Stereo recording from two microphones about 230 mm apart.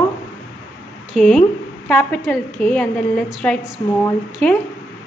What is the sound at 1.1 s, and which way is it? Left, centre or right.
A woman's voice, centre.